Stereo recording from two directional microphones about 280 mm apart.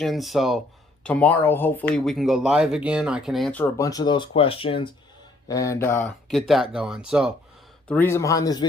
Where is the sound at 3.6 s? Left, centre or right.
Centre.